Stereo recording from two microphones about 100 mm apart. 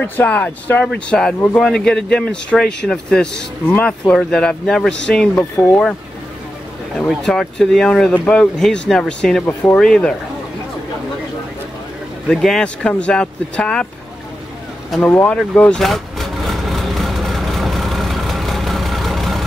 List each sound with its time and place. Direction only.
0.0 s speech: 15° left (ahead or behind)
7.1 s speech: 5° left (ahead or behind)
12.3 s speech: 5° left (ahead or behind)
15.0 s speech: 15° left (ahead or behind)
15.8 s vehicle: centre (ahead or behind)